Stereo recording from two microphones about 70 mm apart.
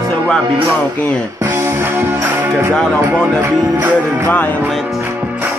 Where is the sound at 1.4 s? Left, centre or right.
Right.